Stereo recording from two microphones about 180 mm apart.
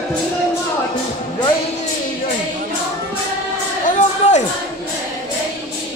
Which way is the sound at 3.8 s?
40° left (ahead or behind).